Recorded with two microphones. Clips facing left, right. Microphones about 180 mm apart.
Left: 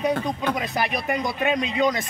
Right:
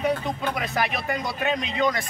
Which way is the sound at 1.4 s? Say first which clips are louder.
Left 2 dB; 15° left (ahead or behind).